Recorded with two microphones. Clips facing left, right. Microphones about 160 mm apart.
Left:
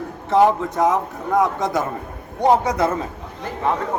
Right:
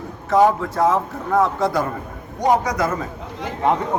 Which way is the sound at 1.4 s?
20° left (ahead or behind).